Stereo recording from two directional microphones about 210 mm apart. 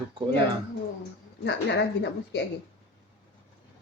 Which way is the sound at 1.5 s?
55° left (ahead or behind).